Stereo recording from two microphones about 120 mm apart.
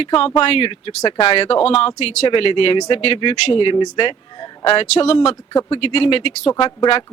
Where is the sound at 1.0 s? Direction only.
45° left (ahead or behind).